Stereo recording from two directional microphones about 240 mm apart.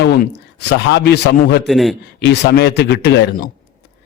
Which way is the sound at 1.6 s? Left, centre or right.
Centre.